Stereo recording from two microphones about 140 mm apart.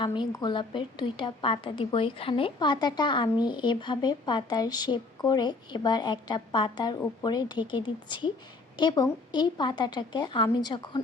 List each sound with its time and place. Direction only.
0.0 s speech: 35° left (ahead or behind)